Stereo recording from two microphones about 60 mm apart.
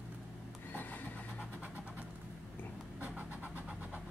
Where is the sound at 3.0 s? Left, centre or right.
Right.